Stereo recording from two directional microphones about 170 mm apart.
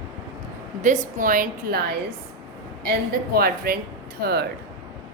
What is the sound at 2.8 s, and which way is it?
A woman's voice, 60° right (ahead or behind).